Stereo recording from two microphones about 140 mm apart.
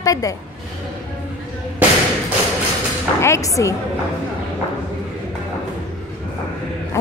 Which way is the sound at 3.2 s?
20° left (ahead or behind).